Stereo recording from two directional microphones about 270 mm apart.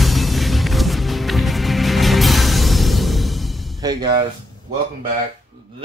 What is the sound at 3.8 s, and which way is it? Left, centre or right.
Music, centre.